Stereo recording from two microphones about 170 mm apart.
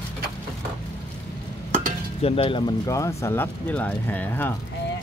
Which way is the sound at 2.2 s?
30° left (ahead or behind).